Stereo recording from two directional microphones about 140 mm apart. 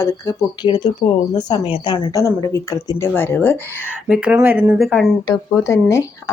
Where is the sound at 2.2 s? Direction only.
20° left (ahead or behind).